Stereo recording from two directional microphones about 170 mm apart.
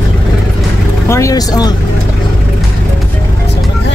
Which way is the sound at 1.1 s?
20° left (ahead or behind).